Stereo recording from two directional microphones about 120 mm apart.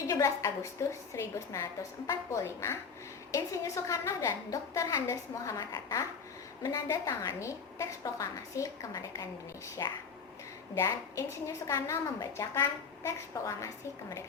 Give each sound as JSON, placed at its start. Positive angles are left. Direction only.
{"t": 0.1, "sound": "a woman's voice", "side_deg": 25}